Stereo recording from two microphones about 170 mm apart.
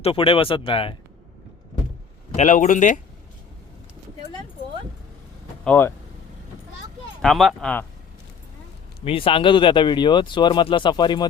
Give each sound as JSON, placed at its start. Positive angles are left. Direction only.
{"t": 0.0, "sound": "speech", "side_deg": 30}
{"t": 2.3, "sound": "speech", "side_deg": 45}
{"t": 5.6, "sound": "speech", "side_deg": 10}
{"t": 7.2, "sound": "speech", "side_deg": 0}
{"t": 9.0, "sound": "speech", "side_deg": 30}